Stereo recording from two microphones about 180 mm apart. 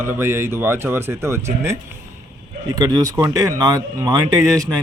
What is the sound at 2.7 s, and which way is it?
Speech, 20° right (ahead or behind).